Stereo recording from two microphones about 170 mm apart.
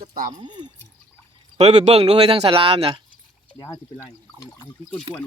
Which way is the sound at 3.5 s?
20° left (ahead or behind).